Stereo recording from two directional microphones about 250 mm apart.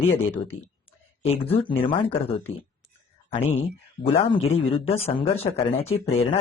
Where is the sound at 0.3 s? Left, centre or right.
Left.